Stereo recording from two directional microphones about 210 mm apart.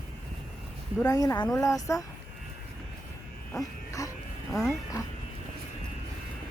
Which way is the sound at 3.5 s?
15° left (ahead or behind).